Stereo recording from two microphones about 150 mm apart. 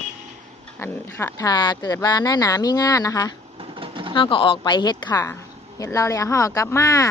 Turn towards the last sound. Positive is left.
turn(degrees=20)  # may be behind; listen again after turning